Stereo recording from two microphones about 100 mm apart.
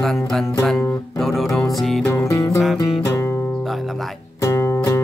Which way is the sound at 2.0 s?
30° left (ahead or behind).